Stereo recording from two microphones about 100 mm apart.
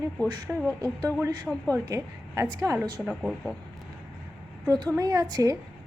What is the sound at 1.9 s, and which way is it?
Speech, 35° right (ahead or behind).